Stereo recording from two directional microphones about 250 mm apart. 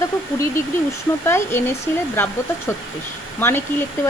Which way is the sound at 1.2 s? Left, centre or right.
Centre.